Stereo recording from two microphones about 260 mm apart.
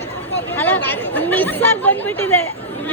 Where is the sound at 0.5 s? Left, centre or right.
Centre.